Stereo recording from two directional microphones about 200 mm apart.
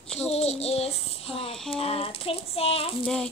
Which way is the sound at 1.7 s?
30° left (ahead or behind).